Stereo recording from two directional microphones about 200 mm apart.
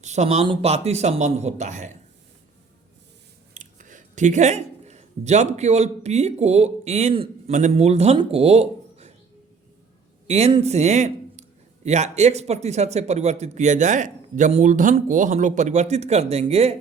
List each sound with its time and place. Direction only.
0.0 s a man's voice: 35° right (ahead or behind)
3.5 s speech: 40° right (ahead or behind)
10.2 s a man's voice: 30° right (ahead or behind)